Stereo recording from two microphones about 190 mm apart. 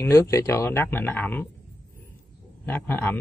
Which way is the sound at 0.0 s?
15° left (ahead or behind).